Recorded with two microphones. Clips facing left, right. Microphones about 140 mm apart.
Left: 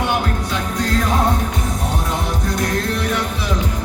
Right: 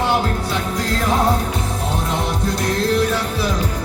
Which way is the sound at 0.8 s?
30° right (ahead or behind).